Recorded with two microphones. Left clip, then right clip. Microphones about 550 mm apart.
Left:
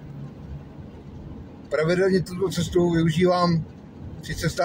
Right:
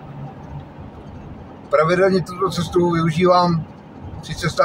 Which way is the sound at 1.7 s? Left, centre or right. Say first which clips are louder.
Right 6 dB; left.